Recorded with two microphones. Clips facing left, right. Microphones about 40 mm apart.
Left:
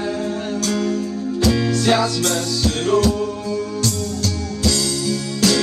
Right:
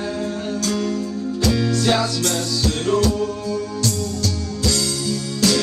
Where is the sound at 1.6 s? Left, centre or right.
Centre.